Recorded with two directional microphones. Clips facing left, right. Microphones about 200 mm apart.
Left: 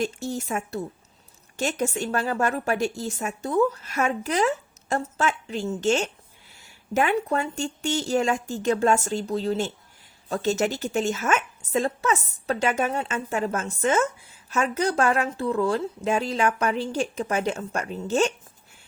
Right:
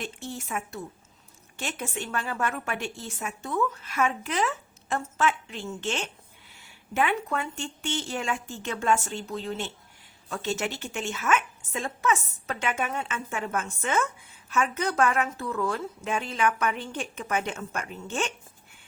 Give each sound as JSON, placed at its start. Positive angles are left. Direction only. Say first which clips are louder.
{"t": 0.0, "sound": "a woman's voice", "louder": "left 8 dB", "side_deg": 40}